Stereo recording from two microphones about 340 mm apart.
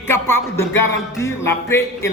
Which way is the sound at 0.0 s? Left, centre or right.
Centre.